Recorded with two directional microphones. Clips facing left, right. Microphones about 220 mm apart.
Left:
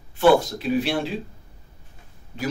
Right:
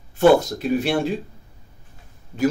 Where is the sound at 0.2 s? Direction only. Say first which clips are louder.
Right 2 dB; 45° right (ahead or behind).